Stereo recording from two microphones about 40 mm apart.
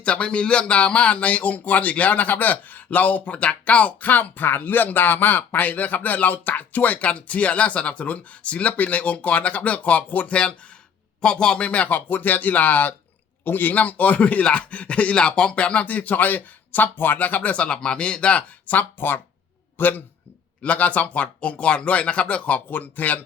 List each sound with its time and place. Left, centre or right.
0.0 s speech: left
11.2 s a man's voice: centre
11.9 s a man's voice: left
18.6 s speech: left
19.8 s speech: left
20.6 s speech: left
22.7 s speech: left